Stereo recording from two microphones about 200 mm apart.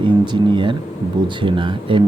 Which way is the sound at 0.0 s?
25° right (ahead or behind).